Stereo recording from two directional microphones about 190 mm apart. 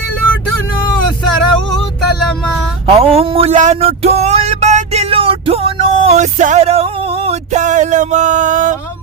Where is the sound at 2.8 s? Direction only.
30° right (ahead or behind).